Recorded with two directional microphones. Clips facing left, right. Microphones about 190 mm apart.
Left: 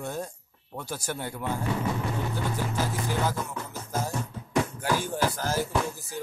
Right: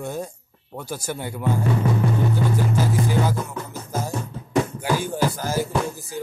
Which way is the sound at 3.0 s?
10° right (ahead or behind).